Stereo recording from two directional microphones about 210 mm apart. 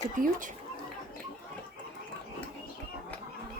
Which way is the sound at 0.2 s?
40° right (ahead or behind).